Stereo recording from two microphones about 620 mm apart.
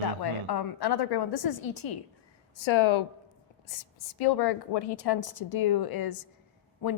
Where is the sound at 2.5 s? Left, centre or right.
Left.